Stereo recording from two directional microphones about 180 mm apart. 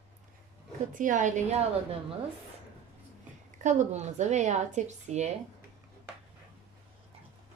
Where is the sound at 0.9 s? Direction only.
45° right (ahead or behind).